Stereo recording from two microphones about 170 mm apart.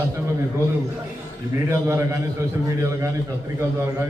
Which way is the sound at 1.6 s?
15° right (ahead or behind).